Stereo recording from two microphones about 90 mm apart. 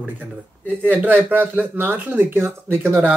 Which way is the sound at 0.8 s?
20° right (ahead or behind).